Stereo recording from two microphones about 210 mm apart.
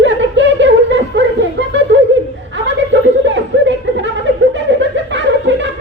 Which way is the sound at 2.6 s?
60° right (ahead or behind).